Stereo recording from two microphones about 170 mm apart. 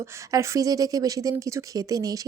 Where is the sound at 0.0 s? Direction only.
15° right (ahead or behind).